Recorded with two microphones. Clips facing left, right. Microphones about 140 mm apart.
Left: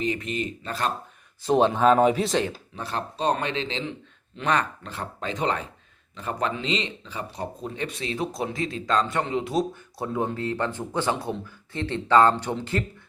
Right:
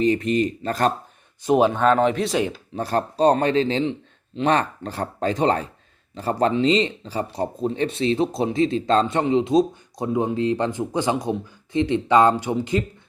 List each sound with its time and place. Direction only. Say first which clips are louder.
0.0 s speech: right 8 dB; 35° right (ahead or behind)
1.5 s speech: right 3 dB; 10° right (ahead or behind)
1.7 s speech: even; 5° left (ahead or behind)
2.7 s speech: right 11 dB; 40° right (ahead or behind); by 12.8 s 15° right (ahead or behind)